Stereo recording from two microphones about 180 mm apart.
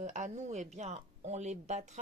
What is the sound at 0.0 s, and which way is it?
A woman's voice, 40° right (ahead or behind).